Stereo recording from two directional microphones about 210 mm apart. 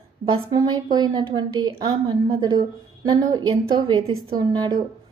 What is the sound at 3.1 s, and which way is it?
A woman's voice, 20° right (ahead or behind).